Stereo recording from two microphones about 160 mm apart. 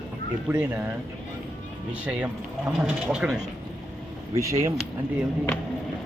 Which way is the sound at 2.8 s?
5° right (ahead or behind).